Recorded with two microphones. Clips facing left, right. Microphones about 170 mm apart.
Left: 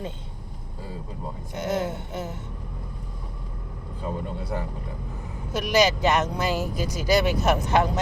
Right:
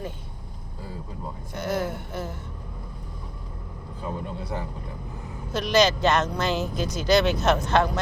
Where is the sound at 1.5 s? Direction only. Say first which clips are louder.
Left 1 dB; 20° left (ahead or behind).